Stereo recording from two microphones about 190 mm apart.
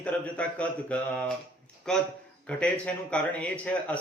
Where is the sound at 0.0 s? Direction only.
5° left (ahead or behind).